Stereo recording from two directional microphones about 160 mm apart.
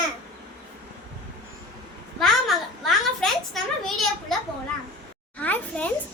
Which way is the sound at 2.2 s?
Centre (ahead or behind).